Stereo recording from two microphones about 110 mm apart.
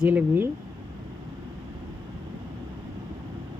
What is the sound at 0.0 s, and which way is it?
Speech, 15° right (ahead or behind).